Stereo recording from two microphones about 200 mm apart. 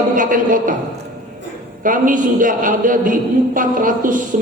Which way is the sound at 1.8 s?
40° right (ahead or behind).